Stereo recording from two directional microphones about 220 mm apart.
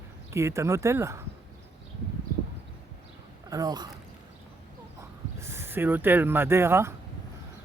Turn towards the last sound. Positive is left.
turn(degrees=-10)  # may be behind; listen again after turning